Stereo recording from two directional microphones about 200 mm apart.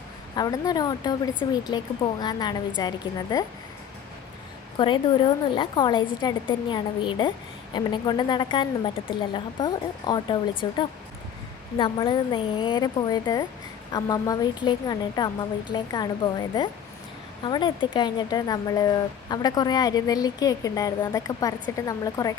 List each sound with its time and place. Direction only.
0.3 s speech: 20° left (ahead or behind)
4.8 s speech: 25° left (ahead or behind)
11.8 s speech: 25° left (ahead or behind)